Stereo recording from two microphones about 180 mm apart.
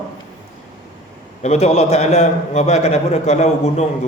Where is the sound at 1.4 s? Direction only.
35° left (ahead or behind).